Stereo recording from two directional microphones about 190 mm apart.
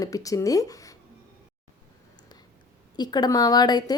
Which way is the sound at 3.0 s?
20° left (ahead or behind).